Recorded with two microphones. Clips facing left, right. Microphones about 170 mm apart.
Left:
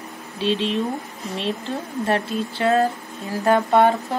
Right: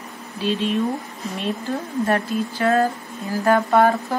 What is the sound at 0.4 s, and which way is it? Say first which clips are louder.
Speech: even; 30° left (ahead or behind).